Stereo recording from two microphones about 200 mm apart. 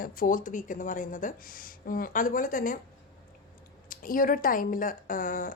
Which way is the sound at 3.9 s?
45° left (ahead or behind).